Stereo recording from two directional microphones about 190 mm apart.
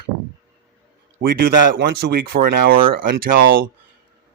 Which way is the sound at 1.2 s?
50° right (ahead or behind).